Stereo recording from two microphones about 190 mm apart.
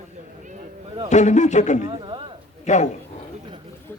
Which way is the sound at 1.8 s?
25° right (ahead or behind).